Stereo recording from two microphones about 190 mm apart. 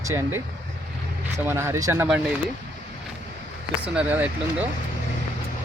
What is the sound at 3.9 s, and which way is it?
Speech, 10° right (ahead or behind).